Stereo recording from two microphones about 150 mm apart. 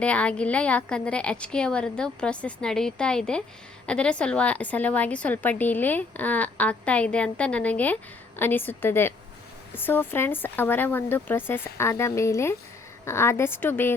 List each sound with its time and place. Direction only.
0.0 s a woman's voice: 10° left (ahead or behind)